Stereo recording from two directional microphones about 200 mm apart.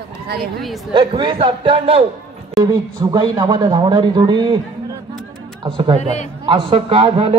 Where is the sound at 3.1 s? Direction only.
20° right (ahead or behind).